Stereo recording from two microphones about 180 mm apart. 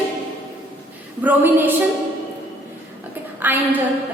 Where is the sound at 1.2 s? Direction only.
10° right (ahead or behind).